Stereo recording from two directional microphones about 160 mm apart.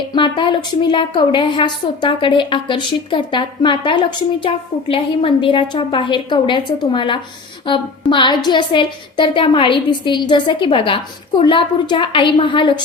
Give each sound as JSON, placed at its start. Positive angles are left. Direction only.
{"t": 0.1, "sound": "a woman's voice", "side_deg": 30}